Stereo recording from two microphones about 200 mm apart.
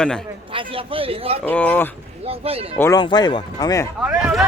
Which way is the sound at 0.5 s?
25° right (ahead or behind).